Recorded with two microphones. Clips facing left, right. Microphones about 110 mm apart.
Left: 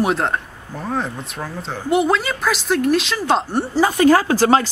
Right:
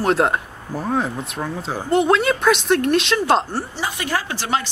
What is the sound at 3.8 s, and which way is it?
Speech, 40° left (ahead or behind).